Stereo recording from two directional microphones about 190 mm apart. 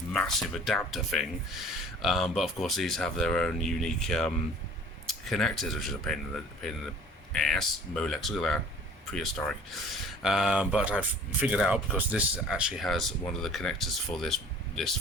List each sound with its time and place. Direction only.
0.1 s speech: 5° left (ahead or behind)